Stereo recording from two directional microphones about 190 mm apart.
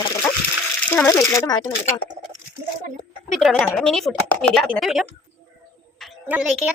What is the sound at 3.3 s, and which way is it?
A woman's voice, centre (ahead or behind).